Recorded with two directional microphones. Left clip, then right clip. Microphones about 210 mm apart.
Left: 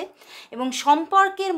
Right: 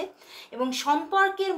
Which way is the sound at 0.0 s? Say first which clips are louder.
Left 1 dB; 40° left (ahead or behind).